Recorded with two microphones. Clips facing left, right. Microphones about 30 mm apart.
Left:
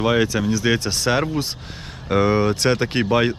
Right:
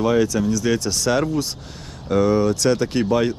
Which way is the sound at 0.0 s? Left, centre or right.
Left.